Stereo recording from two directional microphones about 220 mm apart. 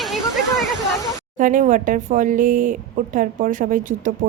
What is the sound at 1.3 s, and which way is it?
Speech, 35° right (ahead or behind).